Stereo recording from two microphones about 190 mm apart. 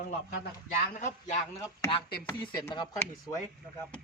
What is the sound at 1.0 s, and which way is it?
Speech, 40° left (ahead or behind).